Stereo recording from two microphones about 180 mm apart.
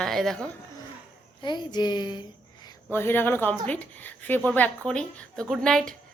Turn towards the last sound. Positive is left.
turn(degrees=0)  # may be behind; listen again after turning